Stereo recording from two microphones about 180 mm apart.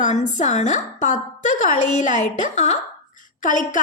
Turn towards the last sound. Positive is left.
turn(degrees=45)  # may be behind; listen again after turning